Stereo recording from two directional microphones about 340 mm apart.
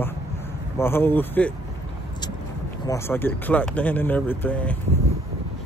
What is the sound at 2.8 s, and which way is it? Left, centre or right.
Speech, centre.